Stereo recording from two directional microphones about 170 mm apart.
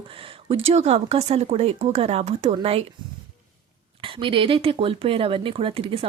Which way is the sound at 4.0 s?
30° right (ahead or behind).